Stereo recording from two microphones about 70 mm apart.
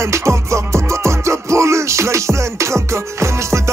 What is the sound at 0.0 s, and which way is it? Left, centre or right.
Music, right.